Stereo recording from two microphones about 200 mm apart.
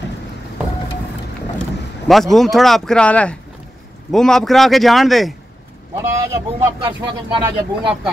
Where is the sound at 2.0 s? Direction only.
Centre (ahead or behind).